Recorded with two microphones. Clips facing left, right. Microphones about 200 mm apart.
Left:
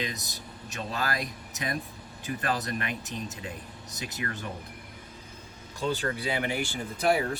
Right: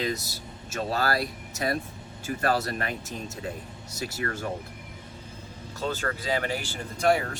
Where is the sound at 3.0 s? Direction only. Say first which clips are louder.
Even; 20° left (ahead or behind).